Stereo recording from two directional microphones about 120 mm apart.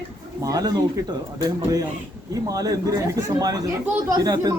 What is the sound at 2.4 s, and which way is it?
Speech, 30° right (ahead or behind).